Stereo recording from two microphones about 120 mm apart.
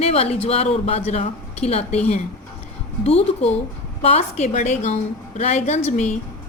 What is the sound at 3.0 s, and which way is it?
A woman's voice, 60° left (ahead or behind).